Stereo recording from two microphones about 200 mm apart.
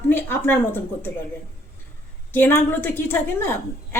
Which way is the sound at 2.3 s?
10° left (ahead or behind).